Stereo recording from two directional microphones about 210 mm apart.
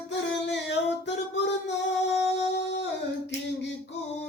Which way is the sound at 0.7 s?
55° left (ahead or behind).